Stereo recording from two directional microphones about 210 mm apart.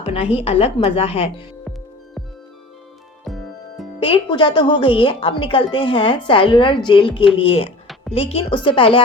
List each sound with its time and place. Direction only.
0.0 s a sound: 30° left (ahead or behind)
0.3 s a woman's voice: 25° left (ahead or behind)
3.2 s music: centre (ahead or behind)
4.0 s a woman's voice: 25° left (ahead or behind)